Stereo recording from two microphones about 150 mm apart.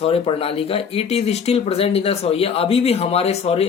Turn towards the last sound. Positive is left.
turn(degrees=40)  # may be behind; listen again after turning